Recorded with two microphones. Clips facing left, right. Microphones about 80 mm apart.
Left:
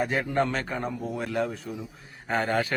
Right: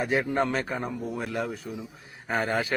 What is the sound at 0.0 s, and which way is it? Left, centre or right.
Speech, centre.